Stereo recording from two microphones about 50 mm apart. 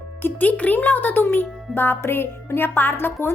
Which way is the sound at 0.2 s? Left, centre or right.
Left.